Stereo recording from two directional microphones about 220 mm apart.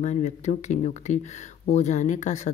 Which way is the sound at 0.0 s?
30° left (ahead or behind).